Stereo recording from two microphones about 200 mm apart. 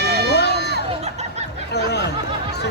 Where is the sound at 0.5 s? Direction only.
55° right (ahead or behind).